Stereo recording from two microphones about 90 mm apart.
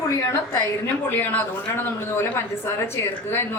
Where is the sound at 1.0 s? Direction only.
20° left (ahead or behind).